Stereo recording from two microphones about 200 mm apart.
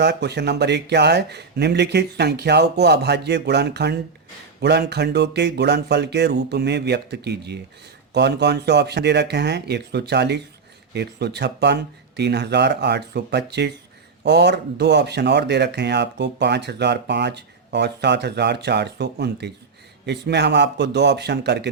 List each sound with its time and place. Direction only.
0.0 s speech: 60° right (ahead or behind)